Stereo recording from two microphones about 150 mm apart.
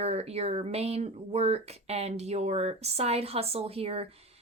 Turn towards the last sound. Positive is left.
turn(degrees=-40)  # may be behind; listen again after turning